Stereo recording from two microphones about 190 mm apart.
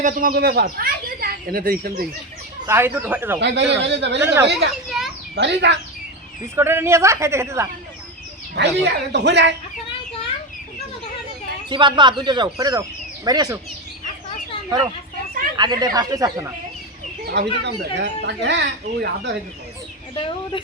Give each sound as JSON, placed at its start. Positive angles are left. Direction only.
{"t": 0.0, "sound": "speech", "side_deg": -45}
{"t": 2.6, "sound": "a woman's voice", "side_deg": -10}
{"t": 3.4, "sound": "speech", "side_deg": -65}
{"t": 4.2, "sound": "a woman's voice", "side_deg": -10}
{"t": 4.7, "sound": "children playing", "side_deg": 0}
{"t": 5.3, "sound": "speech", "side_deg": -60}
{"t": 6.6, "sound": "a woman's voice", "side_deg": -10}
{"t": 8.5, "sound": "speech", "side_deg": -65}
{"t": 11.7, "sound": "speech", "side_deg": -25}
{"t": 15.5, "sound": "speech", "side_deg": -20}
{"t": 17.2, "sound": "speech", "side_deg": -60}
{"t": 20.1, "sound": "speech", "side_deg": 25}